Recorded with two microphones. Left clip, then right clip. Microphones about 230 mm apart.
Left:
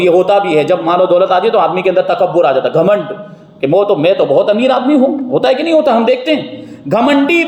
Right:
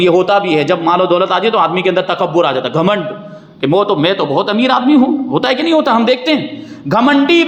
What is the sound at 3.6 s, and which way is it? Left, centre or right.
A man's voice, right.